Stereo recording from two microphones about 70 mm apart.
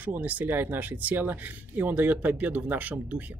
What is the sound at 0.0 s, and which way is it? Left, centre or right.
Speech, right.